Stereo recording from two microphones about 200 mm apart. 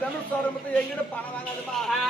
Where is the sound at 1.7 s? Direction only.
Centre (ahead or behind).